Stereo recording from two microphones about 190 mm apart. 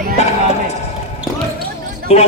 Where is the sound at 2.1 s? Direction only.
30° left (ahead or behind).